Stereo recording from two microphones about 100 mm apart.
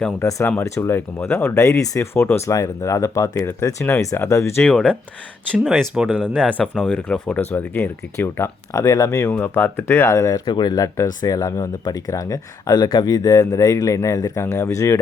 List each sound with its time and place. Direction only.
0.2 s speech: 30° left (ahead or behind)
4.6 s speech: 10° left (ahead or behind)
5.9 s speech: 10° right (ahead or behind)
6.6 s speech: 15° left (ahead or behind); by 9.3 s 30° left (ahead or behind)
9.3 s speech: 20° left (ahead or behind)